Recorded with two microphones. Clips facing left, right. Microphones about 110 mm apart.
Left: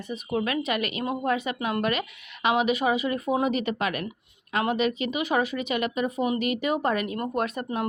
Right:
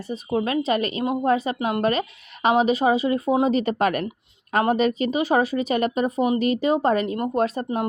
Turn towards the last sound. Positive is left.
turn(degrees=-30)  # may be behind; listen again after turning